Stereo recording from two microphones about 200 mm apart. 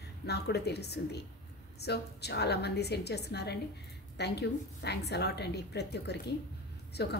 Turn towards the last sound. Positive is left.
turn(degrees=55)  # may be behind; listen again after turning